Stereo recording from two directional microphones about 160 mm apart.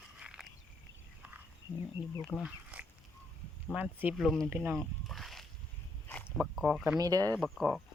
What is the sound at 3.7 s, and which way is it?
Speech, 10° right (ahead or behind).